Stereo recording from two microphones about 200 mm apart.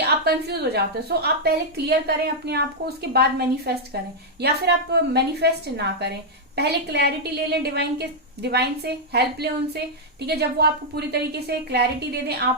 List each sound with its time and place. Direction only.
0.3 s a woman's voice: 55° right (ahead or behind)